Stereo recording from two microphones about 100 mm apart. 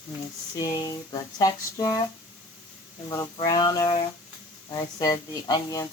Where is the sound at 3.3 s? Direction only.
45° left (ahead or behind).